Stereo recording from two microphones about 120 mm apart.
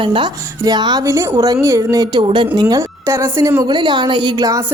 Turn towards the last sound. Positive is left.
turn(degrees=-40)  # may be behind; listen again after turning